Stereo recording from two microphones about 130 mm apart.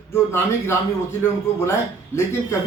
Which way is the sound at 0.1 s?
20° left (ahead or behind).